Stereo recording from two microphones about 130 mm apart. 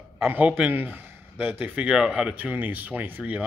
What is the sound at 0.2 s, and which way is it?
A man's voice, 10° right (ahead or behind).